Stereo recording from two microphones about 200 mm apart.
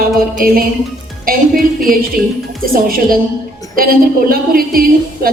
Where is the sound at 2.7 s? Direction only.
45° right (ahead or behind).